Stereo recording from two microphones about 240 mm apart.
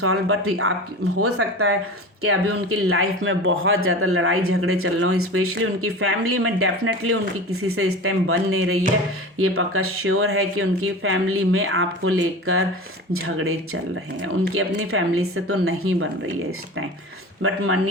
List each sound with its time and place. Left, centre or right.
0.0 s speech: right